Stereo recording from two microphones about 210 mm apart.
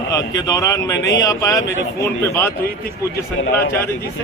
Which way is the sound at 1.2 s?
15° left (ahead or behind).